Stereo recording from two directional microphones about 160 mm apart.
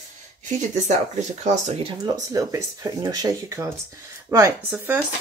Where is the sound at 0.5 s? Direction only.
45° right (ahead or behind).